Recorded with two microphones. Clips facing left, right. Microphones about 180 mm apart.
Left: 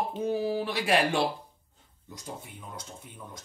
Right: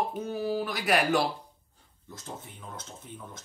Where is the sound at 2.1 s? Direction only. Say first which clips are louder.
Left 1 dB; 15° left (ahead or behind).